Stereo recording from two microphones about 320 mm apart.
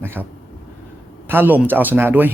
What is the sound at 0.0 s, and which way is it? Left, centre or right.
Speech, centre.